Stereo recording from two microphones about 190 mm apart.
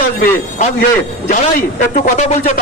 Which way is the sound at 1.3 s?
45° left (ahead or behind).